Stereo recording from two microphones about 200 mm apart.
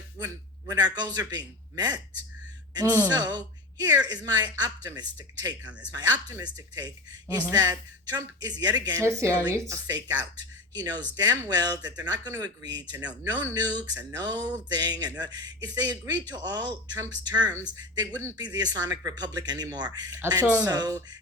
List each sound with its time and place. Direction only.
0.7 s speech: 20° right (ahead or behind)
11.2 s speech: 20° right (ahead or behind)